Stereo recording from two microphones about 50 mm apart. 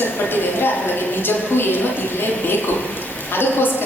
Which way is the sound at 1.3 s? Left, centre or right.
Left.